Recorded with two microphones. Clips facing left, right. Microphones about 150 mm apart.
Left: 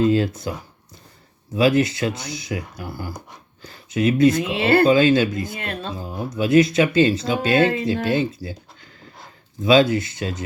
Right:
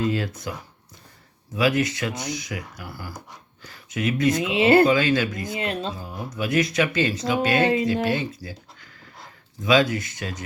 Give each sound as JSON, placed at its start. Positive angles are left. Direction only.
{"t": 0.0, "sound": "speech", "side_deg": 30}
{"t": 1.5, "sound": "speech", "side_deg": 30}
{"t": 4.5, "sound": "speech", "side_deg": -20}
{"t": 4.9, "sound": "speech", "side_deg": 25}
{"t": 5.5, "sound": "speech", "side_deg": -20}
{"t": 6.0, "sound": "speech", "side_deg": 25}